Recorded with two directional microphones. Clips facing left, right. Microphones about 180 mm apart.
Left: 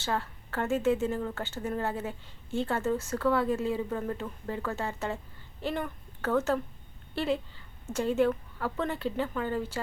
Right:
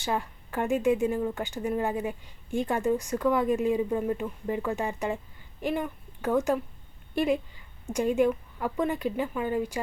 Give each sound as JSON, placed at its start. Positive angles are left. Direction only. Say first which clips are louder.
{"t": 0.0, "sound": "speech", "louder": "right 2 dB", "side_deg": -15}